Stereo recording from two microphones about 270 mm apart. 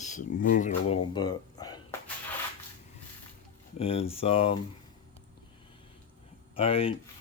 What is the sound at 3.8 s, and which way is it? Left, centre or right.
Speech, left.